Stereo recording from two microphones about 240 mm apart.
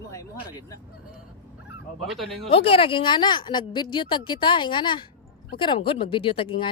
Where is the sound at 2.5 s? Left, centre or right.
Left.